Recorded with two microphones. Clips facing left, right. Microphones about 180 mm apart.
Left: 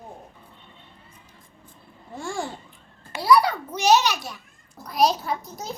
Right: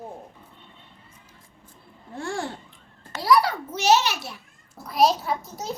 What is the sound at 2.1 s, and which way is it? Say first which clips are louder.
A child's voice: even; centre (ahead or behind).